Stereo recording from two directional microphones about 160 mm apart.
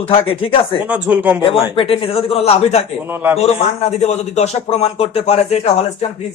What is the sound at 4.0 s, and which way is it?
Speech, 45° left (ahead or behind).